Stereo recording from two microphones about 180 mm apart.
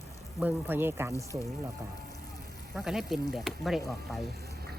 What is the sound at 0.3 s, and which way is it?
Speech, 10° right (ahead or behind).